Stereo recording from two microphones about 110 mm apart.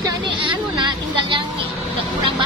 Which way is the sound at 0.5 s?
45° right (ahead or behind).